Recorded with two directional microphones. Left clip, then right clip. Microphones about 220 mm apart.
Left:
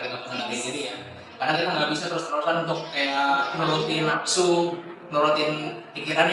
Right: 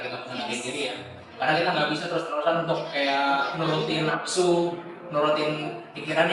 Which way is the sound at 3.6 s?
25° right (ahead or behind).